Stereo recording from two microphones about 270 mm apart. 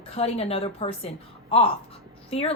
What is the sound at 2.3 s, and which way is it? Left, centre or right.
Speech, left.